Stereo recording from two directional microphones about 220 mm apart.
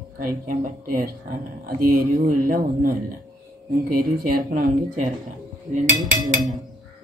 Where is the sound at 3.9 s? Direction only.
40° right (ahead or behind).